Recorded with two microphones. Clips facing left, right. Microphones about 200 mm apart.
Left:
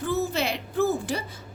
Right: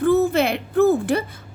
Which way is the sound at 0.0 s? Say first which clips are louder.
Right 9 dB; 55° right (ahead or behind).